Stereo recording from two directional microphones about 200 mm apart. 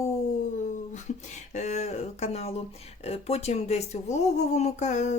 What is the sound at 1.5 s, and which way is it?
Speech, 35° left (ahead or behind).